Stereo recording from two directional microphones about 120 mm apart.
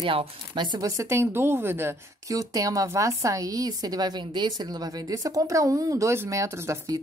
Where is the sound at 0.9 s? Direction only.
20° right (ahead or behind).